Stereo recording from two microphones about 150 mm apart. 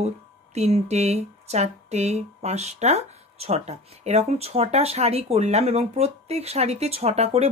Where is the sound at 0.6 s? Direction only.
45° right (ahead or behind).